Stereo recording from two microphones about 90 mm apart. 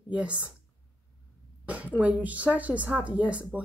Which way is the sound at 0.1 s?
15° right (ahead or behind).